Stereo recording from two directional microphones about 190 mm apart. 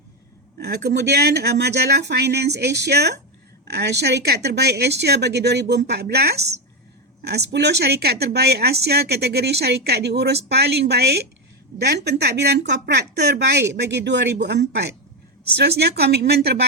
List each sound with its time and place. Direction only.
0.6 s a woman's voice: 60° right (ahead or behind)